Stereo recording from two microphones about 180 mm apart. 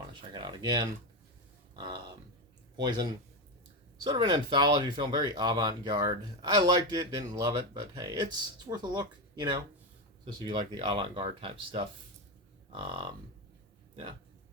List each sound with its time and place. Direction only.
0.2 s speech: 25° right (ahead or behind)
2.7 s speech: 25° right (ahead or behind)